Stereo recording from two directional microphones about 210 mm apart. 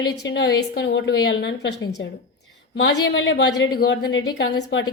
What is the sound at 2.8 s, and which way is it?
A woman's voice, 60° left (ahead or behind).